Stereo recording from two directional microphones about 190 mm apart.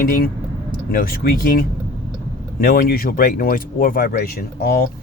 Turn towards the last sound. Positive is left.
turn(degrees=55)  # may be behind; listen again after turning